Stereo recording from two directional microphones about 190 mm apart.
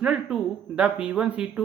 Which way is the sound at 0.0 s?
5° right (ahead or behind).